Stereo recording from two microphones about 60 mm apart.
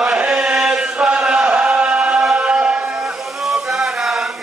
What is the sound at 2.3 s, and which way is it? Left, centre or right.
Music, centre.